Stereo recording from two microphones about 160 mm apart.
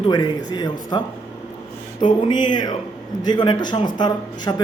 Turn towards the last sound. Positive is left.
turn(degrees=25)  # may be behind; listen again after turning